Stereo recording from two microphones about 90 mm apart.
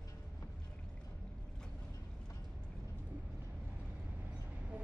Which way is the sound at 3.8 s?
15° right (ahead or behind).